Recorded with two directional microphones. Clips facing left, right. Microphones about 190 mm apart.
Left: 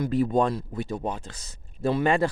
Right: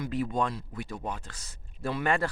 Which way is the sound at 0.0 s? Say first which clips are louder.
Left 7 dB; 35° left (ahead or behind).